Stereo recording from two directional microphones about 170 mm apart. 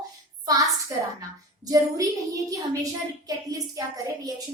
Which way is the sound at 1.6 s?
20° right (ahead or behind).